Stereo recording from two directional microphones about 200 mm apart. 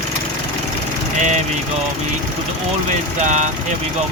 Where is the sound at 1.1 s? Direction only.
35° right (ahead or behind).